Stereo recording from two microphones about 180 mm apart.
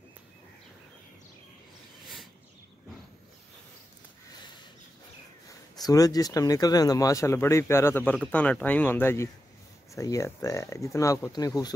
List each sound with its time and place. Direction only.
5.8 s speech: 20° left (ahead or behind)